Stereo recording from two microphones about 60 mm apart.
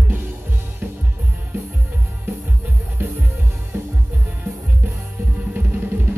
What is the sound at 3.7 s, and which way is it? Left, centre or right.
Music, right.